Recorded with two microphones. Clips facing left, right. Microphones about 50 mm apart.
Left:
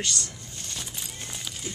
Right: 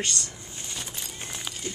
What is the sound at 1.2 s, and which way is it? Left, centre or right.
Music, centre.